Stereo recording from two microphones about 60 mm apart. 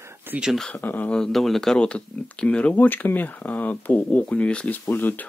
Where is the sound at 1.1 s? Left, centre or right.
Centre.